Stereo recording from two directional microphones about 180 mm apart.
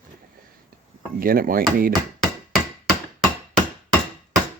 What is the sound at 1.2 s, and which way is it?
Speech, 55° right (ahead or behind).